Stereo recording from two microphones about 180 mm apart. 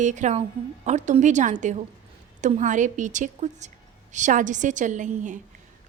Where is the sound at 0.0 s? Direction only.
40° right (ahead or behind).